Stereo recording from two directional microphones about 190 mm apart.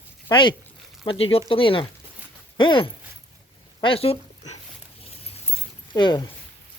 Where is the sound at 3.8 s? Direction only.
30° left (ahead or behind).